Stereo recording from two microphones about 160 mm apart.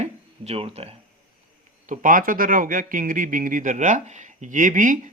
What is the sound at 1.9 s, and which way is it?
Speech, 55° right (ahead or behind).